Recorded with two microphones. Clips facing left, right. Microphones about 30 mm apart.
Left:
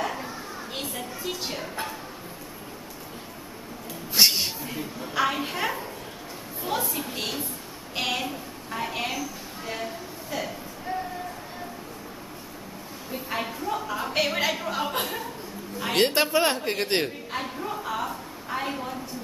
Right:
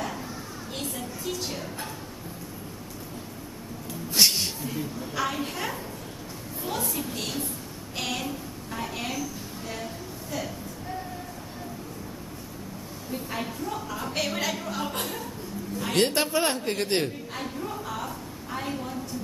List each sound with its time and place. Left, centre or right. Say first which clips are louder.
0.0 s children playing: left 3 dB; centre
0.9 s a woman's voice: even; left
4.1 s a man's voice: left 2 dB; centre
9.7 s a sound: left 4 dB; centre
13.1 s a woman's voice: left 2 dB; centre